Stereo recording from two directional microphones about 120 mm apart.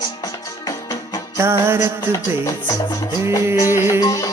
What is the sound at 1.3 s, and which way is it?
Music, 20° right (ahead or behind).